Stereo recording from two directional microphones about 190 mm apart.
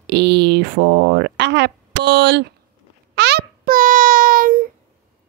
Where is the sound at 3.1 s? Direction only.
60° right (ahead or behind).